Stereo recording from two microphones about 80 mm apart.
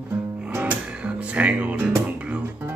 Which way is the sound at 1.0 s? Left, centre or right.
Centre.